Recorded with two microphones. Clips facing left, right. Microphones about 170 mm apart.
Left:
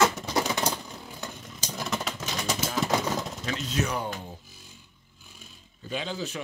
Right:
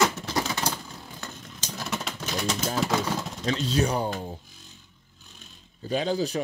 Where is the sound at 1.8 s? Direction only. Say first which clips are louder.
Left 1 dB; centre (ahead or behind).